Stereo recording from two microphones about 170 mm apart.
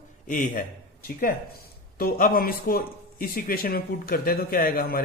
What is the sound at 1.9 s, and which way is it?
A man's voice, 60° left (ahead or behind).